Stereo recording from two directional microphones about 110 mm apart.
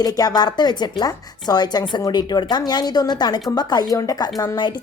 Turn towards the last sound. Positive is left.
turn(degrees=40)  # may be behind; listen again after turning